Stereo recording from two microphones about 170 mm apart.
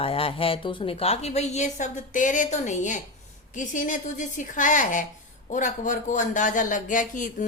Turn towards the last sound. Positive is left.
turn(degrees=50)  # may be behind; listen again after turning